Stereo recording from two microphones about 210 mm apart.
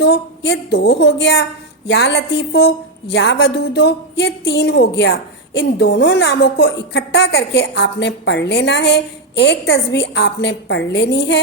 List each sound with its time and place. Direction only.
0.0 s a woman's voice: 50° left (ahead or behind)